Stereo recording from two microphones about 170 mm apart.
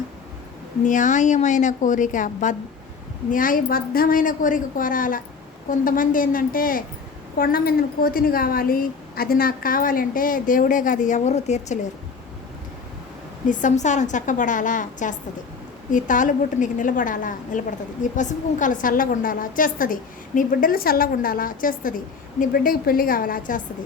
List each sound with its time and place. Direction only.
0.9 s a woman's voice: 50° left (ahead or behind)
13.5 s a woman's voice: 50° left (ahead or behind)